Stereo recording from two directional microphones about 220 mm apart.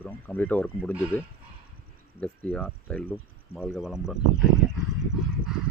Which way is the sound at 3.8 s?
Centre (ahead or behind).